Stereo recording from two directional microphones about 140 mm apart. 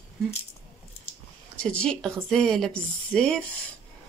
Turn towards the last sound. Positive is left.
turn(degrees=10)  # may be behind; listen again after turning